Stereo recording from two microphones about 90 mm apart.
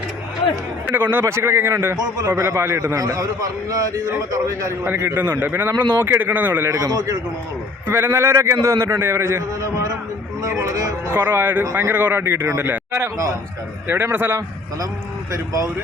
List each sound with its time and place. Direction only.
0.9 s a man's voice: 20° right (ahead or behind)
6.7 s a man's voice: 40° right (ahead or behind)
7.9 s a man's voice: 25° right (ahead or behind)